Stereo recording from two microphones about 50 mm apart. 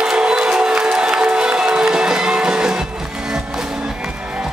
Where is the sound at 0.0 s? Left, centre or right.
Centre.